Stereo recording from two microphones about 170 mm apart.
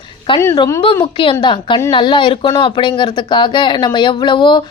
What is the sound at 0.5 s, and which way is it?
Speech, 25° left (ahead or behind).